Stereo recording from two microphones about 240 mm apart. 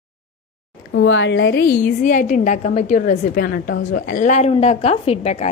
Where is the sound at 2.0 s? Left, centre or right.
Left.